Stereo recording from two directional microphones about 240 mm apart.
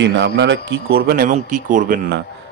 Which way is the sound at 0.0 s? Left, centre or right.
Right.